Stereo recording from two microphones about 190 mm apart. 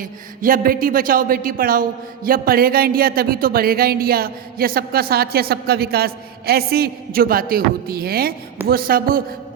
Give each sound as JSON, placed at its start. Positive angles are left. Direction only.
{"t": 0.0, "sound": "speech", "side_deg": -45}